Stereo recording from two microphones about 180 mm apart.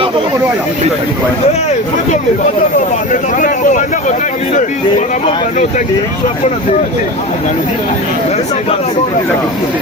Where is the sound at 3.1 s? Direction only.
45° left (ahead or behind).